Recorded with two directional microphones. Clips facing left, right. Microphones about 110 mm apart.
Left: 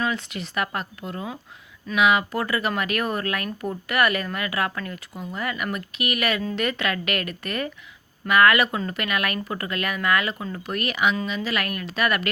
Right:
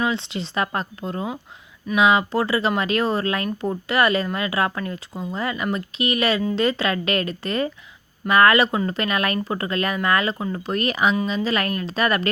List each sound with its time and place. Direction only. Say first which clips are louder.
0.0 s speech: right 3 dB; 25° right (ahead or behind)